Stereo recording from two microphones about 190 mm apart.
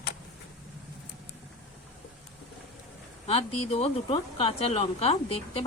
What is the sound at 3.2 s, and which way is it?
Speech, 35° left (ahead or behind).